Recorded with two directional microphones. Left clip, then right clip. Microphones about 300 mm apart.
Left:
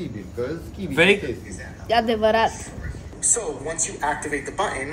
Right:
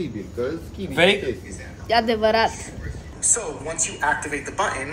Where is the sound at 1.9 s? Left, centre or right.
Centre.